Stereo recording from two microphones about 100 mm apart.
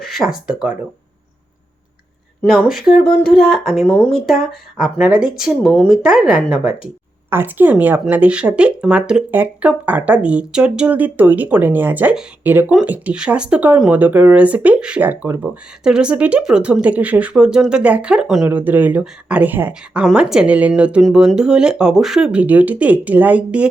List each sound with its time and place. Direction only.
0.0 s speech: centre (ahead or behind)
2.6 s speech: 5° right (ahead or behind)
7.3 s speech: 20° right (ahead or behind); by 18.4 s 5° right (ahead or behind)
18.4 s speech: 20° right (ahead or behind)